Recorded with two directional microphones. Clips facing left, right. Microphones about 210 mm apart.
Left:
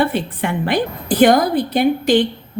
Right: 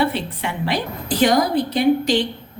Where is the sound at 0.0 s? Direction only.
50° left (ahead or behind).